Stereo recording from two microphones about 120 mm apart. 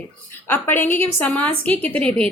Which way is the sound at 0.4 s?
20° left (ahead or behind).